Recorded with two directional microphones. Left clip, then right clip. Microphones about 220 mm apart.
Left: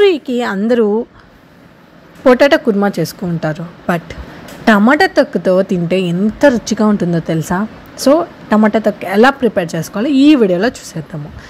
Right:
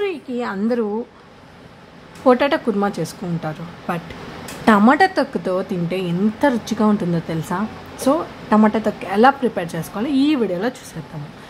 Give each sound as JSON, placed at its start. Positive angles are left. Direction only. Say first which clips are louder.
{"t": 0.0, "sound": "speech", "louder": "left 12 dB", "side_deg": 30}
{"t": 2.2, "sound": "a woman's voice", "louder": "left 7 dB", "side_deg": 20}